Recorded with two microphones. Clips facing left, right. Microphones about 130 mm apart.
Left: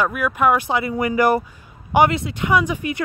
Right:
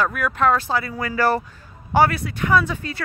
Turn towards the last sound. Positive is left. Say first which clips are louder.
# left 1 dB
turn(degrees=15)  # may be behind; listen again after turning